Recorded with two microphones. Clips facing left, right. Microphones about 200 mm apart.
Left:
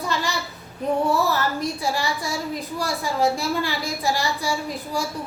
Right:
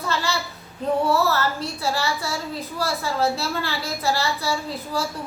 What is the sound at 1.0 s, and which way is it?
A woman's voice, 15° left (ahead or behind).